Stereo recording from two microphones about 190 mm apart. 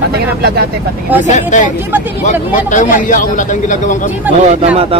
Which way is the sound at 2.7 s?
45° left (ahead or behind).